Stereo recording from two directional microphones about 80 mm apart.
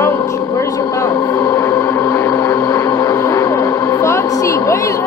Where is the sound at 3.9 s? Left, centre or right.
Left.